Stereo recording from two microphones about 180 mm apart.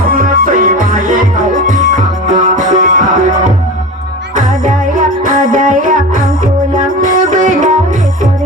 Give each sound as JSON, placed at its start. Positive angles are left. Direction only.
{"t": 0.1, "sound": "music", "side_deg": -50}